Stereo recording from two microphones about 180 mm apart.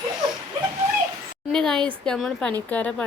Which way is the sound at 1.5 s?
5° left (ahead or behind).